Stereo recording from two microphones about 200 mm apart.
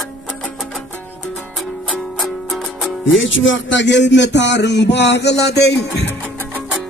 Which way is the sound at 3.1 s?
70° left (ahead or behind).